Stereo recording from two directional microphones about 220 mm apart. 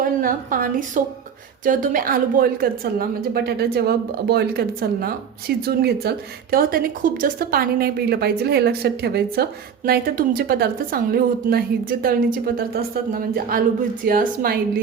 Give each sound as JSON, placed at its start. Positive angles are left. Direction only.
{"t": 0.0, "sound": "a woman's voice", "side_deg": -40}